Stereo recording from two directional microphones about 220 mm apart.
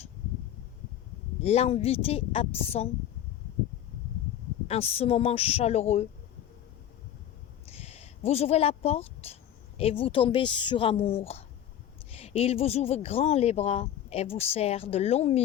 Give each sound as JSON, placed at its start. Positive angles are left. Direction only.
{"t": 1.4, "sound": "speech", "side_deg": 25}
{"t": 4.7, "sound": "speech", "side_deg": 25}
{"t": 7.7, "sound": "speech", "side_deg": 30}